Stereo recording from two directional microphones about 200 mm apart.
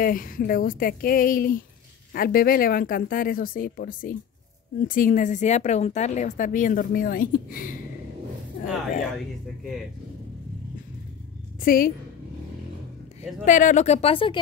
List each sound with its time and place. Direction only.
0.0 s a woman's voice: 45° left (ahead or behind)
11.6 s speech: 45° left (ahead or behind)
13.5 s a woman's voice: 40° left (ahead or behind)